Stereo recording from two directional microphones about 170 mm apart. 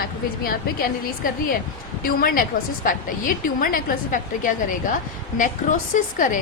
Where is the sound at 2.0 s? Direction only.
60° left (ahead or behind).